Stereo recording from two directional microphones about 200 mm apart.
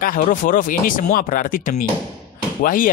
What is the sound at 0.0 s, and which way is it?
A man's voice, 45° left (ahead or behind).